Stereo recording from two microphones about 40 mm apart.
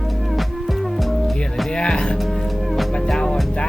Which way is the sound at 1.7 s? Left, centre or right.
Left.